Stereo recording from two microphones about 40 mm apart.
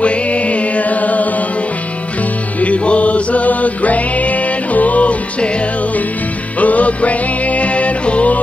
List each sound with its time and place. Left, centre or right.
0.0 s music: left
2.6 s music: left
6.6 s music: left